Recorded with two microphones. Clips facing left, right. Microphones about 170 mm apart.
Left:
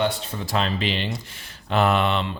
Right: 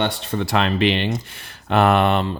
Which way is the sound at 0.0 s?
70° right (ahead or behind).